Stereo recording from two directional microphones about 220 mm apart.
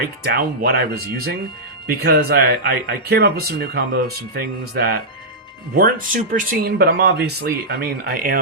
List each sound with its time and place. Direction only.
0.0 s speech: 45° right (ahead or behind)